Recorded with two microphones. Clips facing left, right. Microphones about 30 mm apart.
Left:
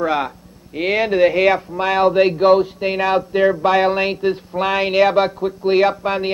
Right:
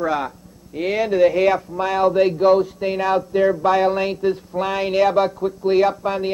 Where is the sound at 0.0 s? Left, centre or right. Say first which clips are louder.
Left 2 dB; left.